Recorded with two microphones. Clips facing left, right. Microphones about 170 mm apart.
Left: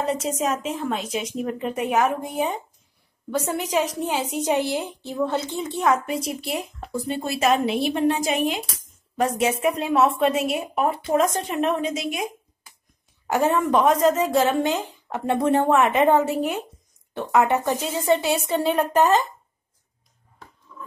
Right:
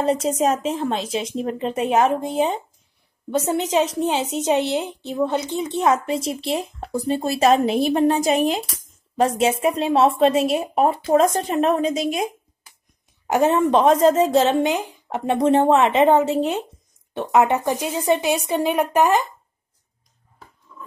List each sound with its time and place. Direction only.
0.4 s speech: 30° right (ahead or behind)
6.9 s a woman's voice: 40° right (ahead or behind)
9.1 s a woman's voice: 30° right (ahead or behind)
13.3 s speech: 20° right (ahead or behind)
20.7 s a sound: 10° right (ahead or behind)